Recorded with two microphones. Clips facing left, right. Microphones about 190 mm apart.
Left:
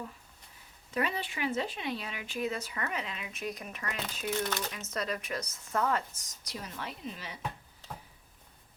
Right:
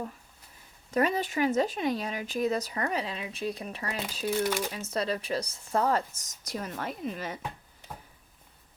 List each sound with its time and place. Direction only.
0.9 s speech: 45° right (ahead or behind)
4.3 s speech: 10° right (ahead or behind)
4.9 s speech: 30° right (ahead or behind); by 7.3 s 50° right (ahead or behind)